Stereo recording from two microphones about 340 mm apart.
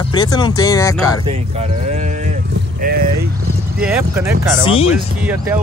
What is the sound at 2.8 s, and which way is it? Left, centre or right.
Vehicle, right.